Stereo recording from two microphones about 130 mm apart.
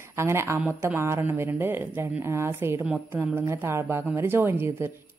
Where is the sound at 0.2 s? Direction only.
20° right (ahead or behind).